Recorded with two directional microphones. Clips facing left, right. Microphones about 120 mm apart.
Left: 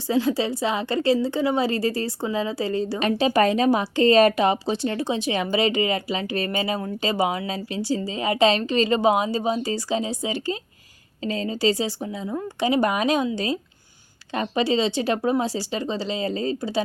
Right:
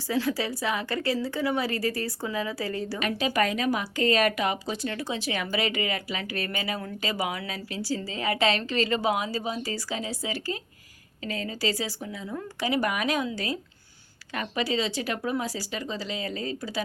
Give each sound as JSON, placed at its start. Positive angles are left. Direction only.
{"t": 0.1, "sound": "a woman's voice", "side_deg": 25}